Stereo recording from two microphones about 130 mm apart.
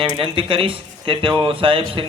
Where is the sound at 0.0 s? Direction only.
40° right (ahead or behind).